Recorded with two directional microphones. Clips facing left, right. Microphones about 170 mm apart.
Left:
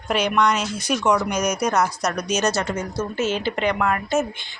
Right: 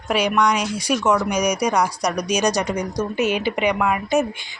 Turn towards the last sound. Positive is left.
turn(degrees=-10)  # may be behind; listen again after turning